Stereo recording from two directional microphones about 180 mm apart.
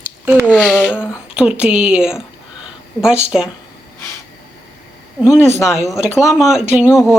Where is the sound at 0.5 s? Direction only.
5° left (ahead or behind).